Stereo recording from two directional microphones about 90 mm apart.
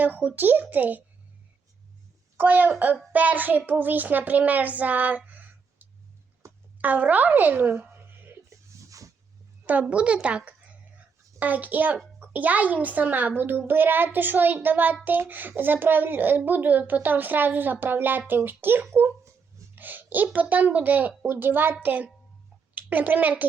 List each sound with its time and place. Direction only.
0.0 s a child's voice: 20° right (ahead or behind)
2.4 s a child's voice: 20° right (ahead or behind)
6.4 s a sound: 35° right (ahead or behind)
6.8 s a child's voice: 20° right (ahead or behind)
8.4 s music: 40° right (ahead or behind)
9.9 s a child's voice: 10° right (ahead or behind)